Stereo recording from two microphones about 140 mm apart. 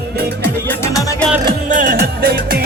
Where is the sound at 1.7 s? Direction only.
80° right.